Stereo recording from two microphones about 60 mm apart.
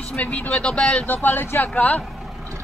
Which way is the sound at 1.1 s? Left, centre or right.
Left.